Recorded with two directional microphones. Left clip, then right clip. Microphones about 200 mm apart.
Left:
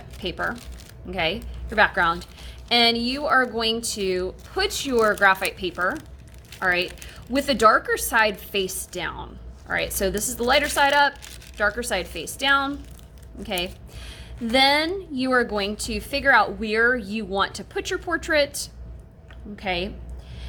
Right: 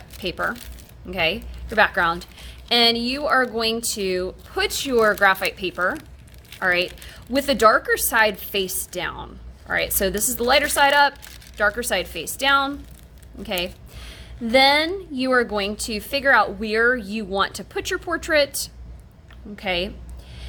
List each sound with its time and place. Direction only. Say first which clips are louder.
0.2 s a woman's voice: right 2 dB; 20° right (ahead or behind)